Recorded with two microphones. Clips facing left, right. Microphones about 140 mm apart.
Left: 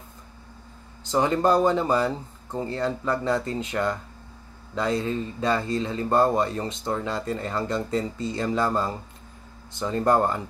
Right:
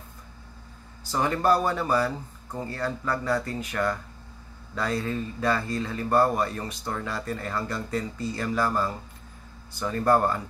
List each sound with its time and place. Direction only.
1.0 s speech: 20° left (ahead or behind)